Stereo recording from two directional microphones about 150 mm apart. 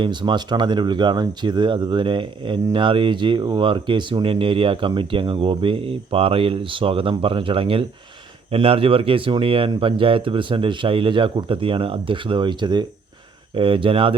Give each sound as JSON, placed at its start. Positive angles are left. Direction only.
{"t": 0.0, "sound": "speech", "side_deg": -30}